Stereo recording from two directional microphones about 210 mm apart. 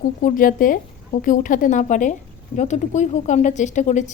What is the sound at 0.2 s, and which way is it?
Speech, 40° left (ahead or behind).